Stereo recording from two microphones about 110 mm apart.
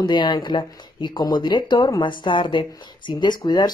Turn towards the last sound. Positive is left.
turn(degrees=40)  # may be behind; listen again after turning